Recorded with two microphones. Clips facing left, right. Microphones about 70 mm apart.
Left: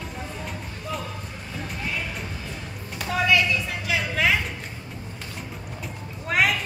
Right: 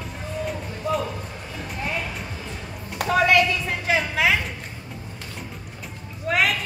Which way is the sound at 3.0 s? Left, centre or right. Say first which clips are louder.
Right 4 dB; right.